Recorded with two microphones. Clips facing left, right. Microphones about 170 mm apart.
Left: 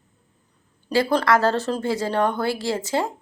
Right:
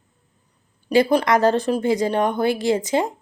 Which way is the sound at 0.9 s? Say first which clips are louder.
Right 3 dB; 15° right (ahead or behind).